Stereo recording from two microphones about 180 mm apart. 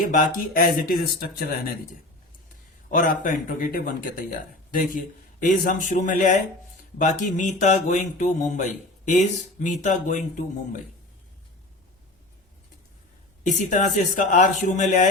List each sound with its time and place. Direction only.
0.0 s speech: 45° left (ahead or behind)
2.9 s speech: 45° left (ahead or behind)
13.4 s speech: 45° left (ahead or behind)